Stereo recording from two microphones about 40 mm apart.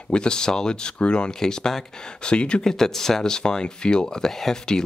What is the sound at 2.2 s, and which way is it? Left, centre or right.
Speech, left.